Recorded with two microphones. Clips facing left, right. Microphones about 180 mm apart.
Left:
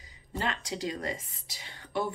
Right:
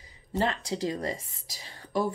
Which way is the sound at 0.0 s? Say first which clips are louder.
Right 6 dB; 30° right (ahead or behind).